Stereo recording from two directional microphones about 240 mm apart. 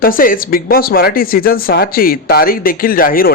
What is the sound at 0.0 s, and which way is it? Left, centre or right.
Speech, left.